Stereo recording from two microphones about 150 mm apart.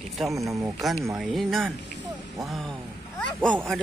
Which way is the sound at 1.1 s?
Centre (ahead or behind).